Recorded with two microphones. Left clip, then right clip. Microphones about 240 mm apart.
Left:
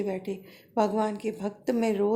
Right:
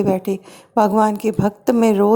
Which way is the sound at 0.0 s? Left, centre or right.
Right.